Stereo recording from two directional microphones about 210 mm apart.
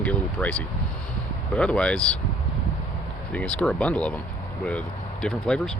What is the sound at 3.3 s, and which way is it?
Speech, 5° left (ahead or behind).